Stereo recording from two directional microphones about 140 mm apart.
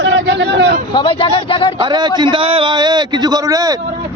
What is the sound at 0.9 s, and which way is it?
Speech, 40° left (ahead or behind).